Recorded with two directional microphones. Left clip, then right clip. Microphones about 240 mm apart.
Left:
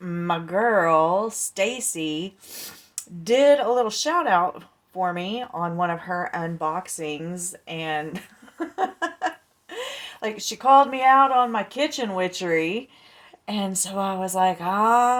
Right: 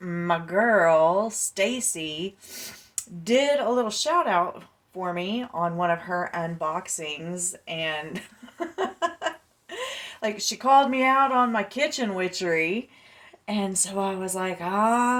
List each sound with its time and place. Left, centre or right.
0.1 s speech: left